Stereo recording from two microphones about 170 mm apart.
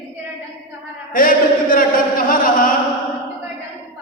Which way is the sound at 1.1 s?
55° left (ahead or behind).